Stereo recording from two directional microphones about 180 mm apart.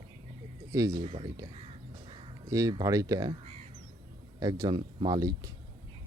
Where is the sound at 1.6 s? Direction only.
30° right (ahead or behind).